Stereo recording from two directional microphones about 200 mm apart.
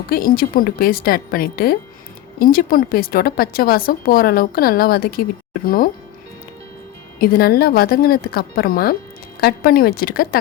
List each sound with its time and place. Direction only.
0.1 s a woman's voice: 45° left (ahead or behind)
7.2 s a woman's voice: 50° left (ahead or behind)